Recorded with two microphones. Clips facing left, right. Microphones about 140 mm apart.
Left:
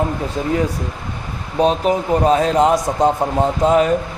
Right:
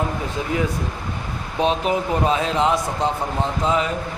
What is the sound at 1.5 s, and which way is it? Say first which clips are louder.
A man's voice: left 4 dB; 40° left (ahead or behind).